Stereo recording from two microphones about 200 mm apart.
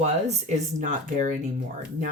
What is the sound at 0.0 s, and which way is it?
Speech, 35° right (ahead or behind).